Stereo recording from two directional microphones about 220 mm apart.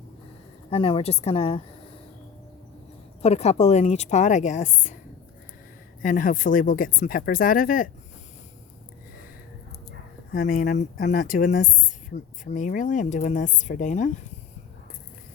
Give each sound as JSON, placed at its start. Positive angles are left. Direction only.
{"t": 0.7, "sound": "a woman's voice", "side_deg": 25}
{"t": 3.2, "sound": "speech", "side_deg": 30}
{"t": 6.0, "sound": "speech", "side_deg": 40}
{"t": 10.3, "sound": "speech", "side_deg": 35}